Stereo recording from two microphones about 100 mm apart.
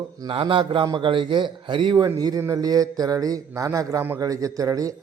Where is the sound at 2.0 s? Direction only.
40° right (ahead or behind).